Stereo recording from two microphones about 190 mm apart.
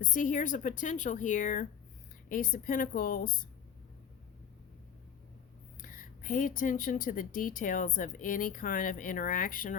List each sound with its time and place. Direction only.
0.0 s a woman's voice: 45° left (ahead or behind)
5.8 s a woman's voice: 45° left (ahead or behind)